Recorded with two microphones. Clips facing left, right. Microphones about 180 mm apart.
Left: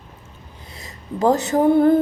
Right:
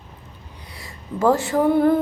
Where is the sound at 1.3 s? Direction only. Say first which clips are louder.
Left 4 dB; 20° left (ahead or behind).